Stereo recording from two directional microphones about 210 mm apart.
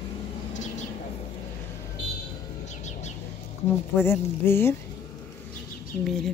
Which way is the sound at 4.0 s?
10° left (ahead or behind).